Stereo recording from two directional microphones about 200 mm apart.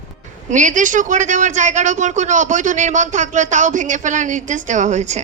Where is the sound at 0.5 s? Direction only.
40° right (ahead or behind).